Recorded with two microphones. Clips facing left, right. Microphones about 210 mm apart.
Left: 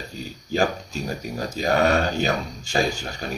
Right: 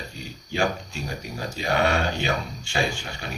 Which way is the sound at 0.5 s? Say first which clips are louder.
Left 3 dB; 40° left (ahead or behind).